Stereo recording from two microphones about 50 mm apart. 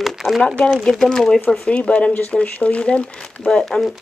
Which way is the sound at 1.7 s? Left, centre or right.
Left.